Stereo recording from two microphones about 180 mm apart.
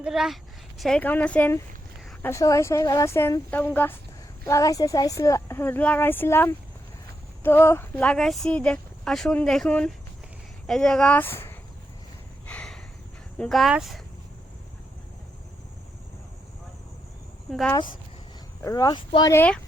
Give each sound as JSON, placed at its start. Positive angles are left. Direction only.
{"t": 0.0, "sound": "a woman's voice", "side_deg": 0}
{"t": 12.5, "sound": "snort", "side_deg": 5}
{"t": 13.4, "sound": "speech", "side_deg": 0}
{"t": 17.5, "sound": "speech", "side_deg": 0}
{"t": 18.6, "sound": "speech", "side_deg": 20}
{"t": 19.3, "sound": "a woman's voice", "side_deg": 10}